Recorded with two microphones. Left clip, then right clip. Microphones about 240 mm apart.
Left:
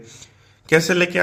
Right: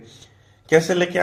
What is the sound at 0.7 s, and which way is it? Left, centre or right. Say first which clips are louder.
Speech: left 1 dB; left.